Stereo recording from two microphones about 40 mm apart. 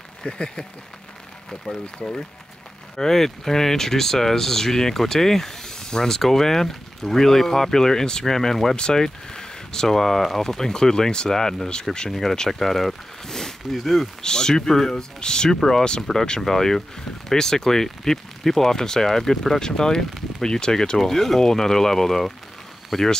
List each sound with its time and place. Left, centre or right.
0.2 s speech: left
3.0 s speech: centre
12.1 s speech: centre
14.2 s speech: centre
21.0 s speech: centre
22.9 s speech: centre